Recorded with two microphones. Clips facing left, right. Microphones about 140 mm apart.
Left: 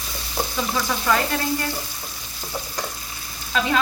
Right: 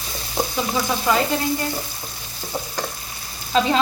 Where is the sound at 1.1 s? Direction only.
20° right (ahead or behind).